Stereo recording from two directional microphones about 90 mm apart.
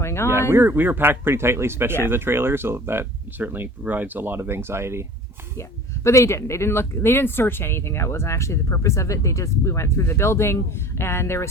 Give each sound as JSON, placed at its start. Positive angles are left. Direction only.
{"t": 0.0, "sound": "a sound", "side_deg": 30}
{"t": 0.5, "sound": "speech", "side_deg": -25}
{"t": 5.5, "sound": "speech", "side_deg": 35}